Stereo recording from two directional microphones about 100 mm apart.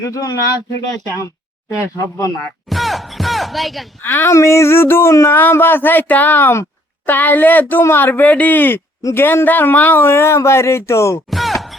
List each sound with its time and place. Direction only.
0.0 s speech: 35° left (ahead or behind)
1.8 s speech: 35° left (ahead or behind)
2.6 s music: centre (ahead or behind)
4.0 s speech: 20° left (ahead or behind)
11.3 s a sound: centre (ahead or behind)